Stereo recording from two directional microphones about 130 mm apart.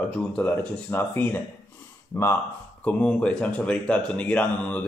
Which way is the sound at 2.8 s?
10° left (ahead or behind).